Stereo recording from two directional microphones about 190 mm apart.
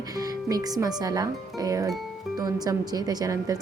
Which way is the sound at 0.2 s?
20° right (ahead or behind).